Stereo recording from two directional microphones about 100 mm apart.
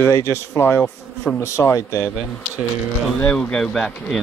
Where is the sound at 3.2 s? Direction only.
10° left (ahead or behind).